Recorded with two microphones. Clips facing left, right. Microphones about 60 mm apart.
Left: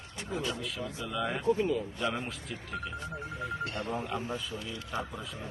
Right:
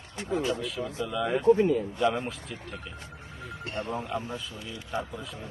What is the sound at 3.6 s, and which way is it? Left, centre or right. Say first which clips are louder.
Speech: right 1 dB; right.